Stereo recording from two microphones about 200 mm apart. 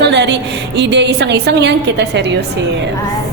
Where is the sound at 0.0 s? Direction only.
60° right (ahead or behind).